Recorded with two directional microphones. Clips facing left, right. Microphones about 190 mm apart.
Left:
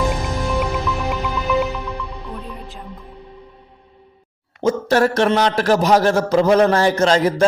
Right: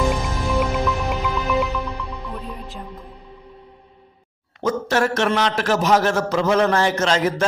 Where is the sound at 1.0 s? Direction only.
Centre (ahead or behind).